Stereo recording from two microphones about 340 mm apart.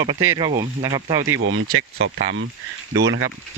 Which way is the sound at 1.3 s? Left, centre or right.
Right.